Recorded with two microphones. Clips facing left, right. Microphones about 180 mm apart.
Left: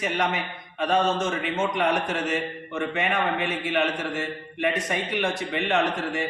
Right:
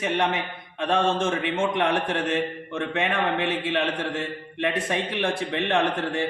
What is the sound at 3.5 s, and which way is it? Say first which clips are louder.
A man's voice: even; 30° right (ahead or behind).